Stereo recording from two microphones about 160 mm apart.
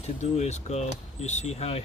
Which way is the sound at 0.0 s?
45° left (ahead or behind).